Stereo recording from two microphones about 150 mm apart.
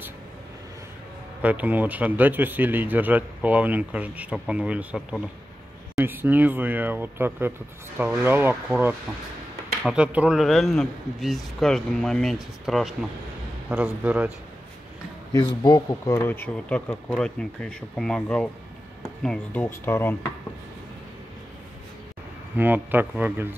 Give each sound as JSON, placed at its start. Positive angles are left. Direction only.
{"t": 1.4, "sound": "a man's voice", "side_deg": -10}
{"t": 15.3, "sound": "a man's voice", "side_deg": 25}
{"t": 22.6, "sound": "speech", "side_deg": -15}